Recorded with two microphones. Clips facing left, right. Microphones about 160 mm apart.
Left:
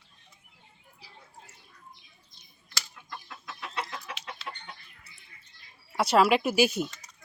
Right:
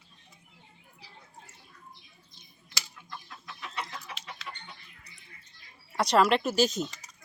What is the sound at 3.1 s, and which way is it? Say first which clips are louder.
Chicken: left 2 dB; 65° left (ahead or behind).